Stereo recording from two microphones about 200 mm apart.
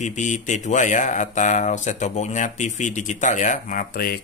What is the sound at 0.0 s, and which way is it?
Speech, 35° left (ahead or behind).